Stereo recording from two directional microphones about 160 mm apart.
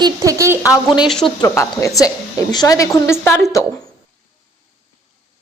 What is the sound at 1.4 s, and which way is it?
A woman's voice, 20° left (ahead or behind).